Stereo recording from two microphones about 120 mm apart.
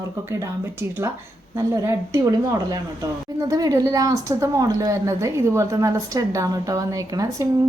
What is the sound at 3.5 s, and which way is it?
A woman's voice, 30° right (ahead or behind).